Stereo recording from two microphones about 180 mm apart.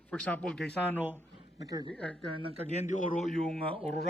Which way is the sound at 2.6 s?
40° left (ahead or behind).